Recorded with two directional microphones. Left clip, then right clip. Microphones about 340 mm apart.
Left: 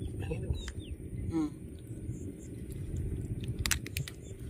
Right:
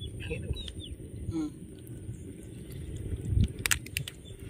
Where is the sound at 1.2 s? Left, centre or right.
Left.